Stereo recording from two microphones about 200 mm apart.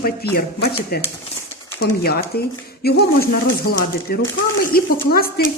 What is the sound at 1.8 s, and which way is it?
Speech, 50° left (ahead or behind).